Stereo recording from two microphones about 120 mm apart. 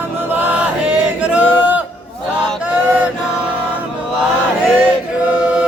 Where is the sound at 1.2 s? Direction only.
10° right (ahead or behind).